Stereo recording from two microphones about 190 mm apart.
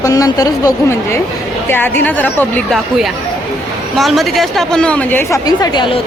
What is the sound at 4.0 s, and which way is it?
A woman's voice, centre (ahead or behind).